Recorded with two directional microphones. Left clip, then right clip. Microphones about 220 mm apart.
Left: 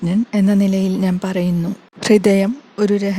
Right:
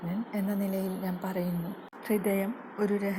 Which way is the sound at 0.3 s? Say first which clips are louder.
Left 14 dB; 50° left (ahead or behind).